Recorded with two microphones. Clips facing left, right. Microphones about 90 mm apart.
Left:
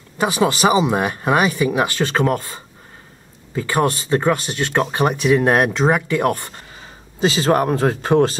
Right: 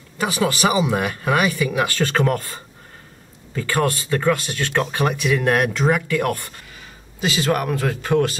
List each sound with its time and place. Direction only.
0.2 s speech: 25° left (ahead or behind)